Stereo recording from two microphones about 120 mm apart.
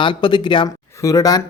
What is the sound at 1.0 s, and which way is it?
Speech, 30° left (ahead or behind).